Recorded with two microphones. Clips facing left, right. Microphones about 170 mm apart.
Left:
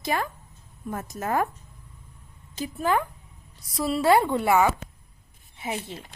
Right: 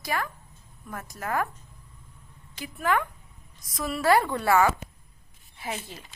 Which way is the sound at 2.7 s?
30° left (ahead or behind).